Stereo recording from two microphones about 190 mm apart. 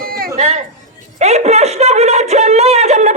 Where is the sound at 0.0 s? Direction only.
50° right (ahead or behind).